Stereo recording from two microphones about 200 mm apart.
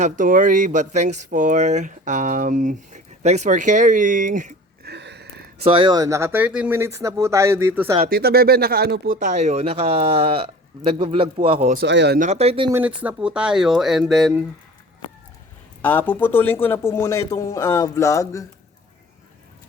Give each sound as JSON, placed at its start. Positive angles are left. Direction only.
{"t": 0.0, "sound": "speech", "side_deg": -40}
{"t": 4.9, "sound": "a sound", "side_deg": -55}
{"t": 5.6, "sound": "speech", "side_deg": -25}
{"t": 8.1, "sound": "speech", "side_deg": -50}
{"t": 11.7, "sound": "speech", "side_deg": -55}
{"t": 12.2, "sound": "speech", "side_deg": -35}
{"t": 12.7, "sound": "speech", "side_deg": -5}
{"t": 15.8, "sound": "a man's voice", "side_deg": 10}